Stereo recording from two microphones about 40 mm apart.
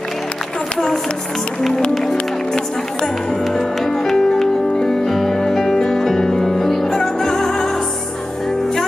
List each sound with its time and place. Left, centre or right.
2.5 s speech: centre
3.4 s music: centre